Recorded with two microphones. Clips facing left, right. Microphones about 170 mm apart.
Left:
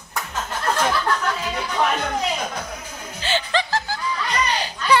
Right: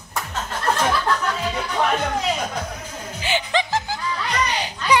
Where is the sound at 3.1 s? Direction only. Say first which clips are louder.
Even; 15° right (ahead or behind).